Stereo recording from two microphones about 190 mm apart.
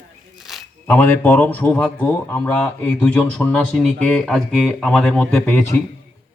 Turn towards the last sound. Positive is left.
turn(degrees=10)  # may be behind; listen again after turning